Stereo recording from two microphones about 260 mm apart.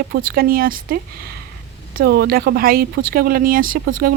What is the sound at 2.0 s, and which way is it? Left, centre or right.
Speech, right.